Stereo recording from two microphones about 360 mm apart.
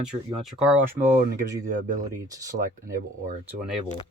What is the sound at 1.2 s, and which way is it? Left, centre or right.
Speech, right.